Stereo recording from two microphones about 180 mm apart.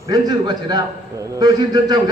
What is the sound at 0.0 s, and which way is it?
A man's voice, 20° right (ahead or behind).